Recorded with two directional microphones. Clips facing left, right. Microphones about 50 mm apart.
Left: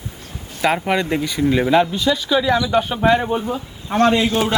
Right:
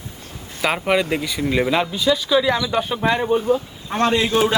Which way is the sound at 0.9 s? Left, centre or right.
Centre.